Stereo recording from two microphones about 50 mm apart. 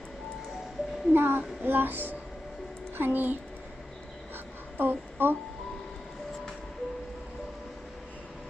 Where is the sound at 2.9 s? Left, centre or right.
Right.